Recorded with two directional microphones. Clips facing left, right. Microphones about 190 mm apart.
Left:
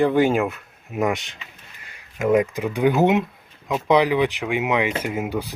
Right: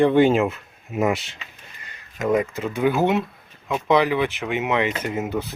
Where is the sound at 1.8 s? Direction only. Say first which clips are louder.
Left 2 dB; 10° left (ahead or behind).